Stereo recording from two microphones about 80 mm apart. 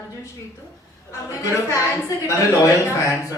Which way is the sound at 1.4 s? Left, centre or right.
Left.